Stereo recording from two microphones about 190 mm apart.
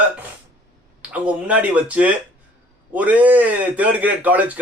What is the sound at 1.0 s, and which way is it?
A man's voice, 5° right (ahead or behind).